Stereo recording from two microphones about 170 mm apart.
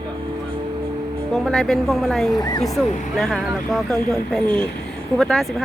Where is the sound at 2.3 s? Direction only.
20° left (ahead or behind).